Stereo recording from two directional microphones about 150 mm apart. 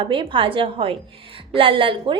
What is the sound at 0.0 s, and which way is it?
A woman's voice, 35° right (ahead or behind).